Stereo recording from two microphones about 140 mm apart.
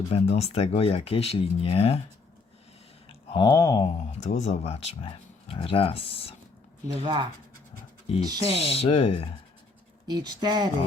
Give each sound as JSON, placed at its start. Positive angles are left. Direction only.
{"t": 0.1, "sound": "speech", "side_deg": 50}
{"t": 3.1, "sound": "speech", "side_deg": 30}
{"t": 4.2, "sound": "speech", "side_deg": 55}
{"t": 7.0, "sound": "speech", "side_deg": -35}
{"t": 8.5, "sound": "speech", "side_deg": 45}
{"t": 10.1, "sound": "speech", "side_deg": -30}